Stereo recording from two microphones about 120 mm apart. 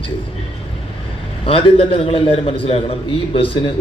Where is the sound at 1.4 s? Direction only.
50° left (ahead or behind).